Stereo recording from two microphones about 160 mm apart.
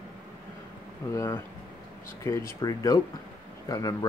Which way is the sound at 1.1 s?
20° left (ahead or behind).